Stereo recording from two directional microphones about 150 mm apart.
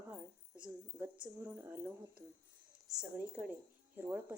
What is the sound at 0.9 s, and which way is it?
Speech, 15° right (ahead or behind).